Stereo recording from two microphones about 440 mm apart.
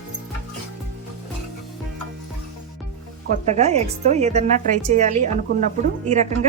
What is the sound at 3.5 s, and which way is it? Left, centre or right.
A woman's voice, centre.